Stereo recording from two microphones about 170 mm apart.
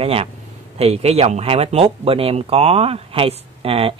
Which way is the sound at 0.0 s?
35° right (ahead or behind).